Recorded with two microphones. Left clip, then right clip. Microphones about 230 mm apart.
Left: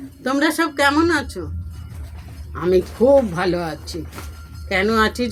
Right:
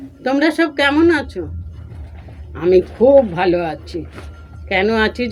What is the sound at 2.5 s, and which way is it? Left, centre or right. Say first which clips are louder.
Speech: right 4 dB; centre.